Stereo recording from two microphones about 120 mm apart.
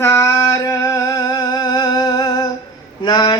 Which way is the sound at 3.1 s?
35° left (ahead or behind).